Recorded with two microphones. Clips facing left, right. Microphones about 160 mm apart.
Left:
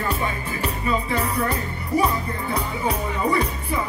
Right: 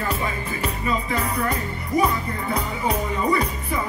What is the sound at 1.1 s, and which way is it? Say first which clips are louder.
Music: left 1 dB; 30° left (ahead or behind).